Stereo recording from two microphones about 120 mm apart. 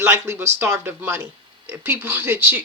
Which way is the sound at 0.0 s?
20° right (ahead or behind).